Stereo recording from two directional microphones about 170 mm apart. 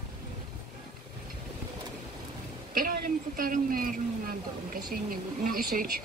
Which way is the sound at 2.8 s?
55° right (ahead or behind).